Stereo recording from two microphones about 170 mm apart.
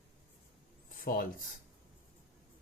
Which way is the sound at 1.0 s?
55° left (ahead or behind).